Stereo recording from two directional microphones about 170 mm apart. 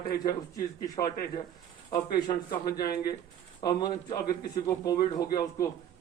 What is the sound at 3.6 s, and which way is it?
Speech, 25° left (ahead or behind).